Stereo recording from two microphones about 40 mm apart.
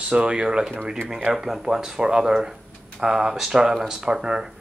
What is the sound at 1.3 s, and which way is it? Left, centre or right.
Speech, centre.